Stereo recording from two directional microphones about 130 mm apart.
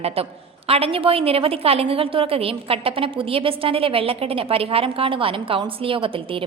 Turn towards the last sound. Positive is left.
turn(degrees=-45)  # may be behind; listen again after turning